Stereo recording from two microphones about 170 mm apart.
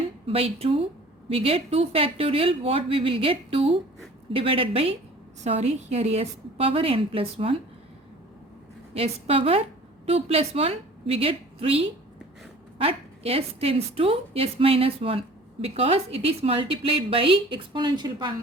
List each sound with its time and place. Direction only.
0.3 s a woman's voice: 35° right (ahead or behind)
9.0 s a woman's voice: 35° right (ahead or behind)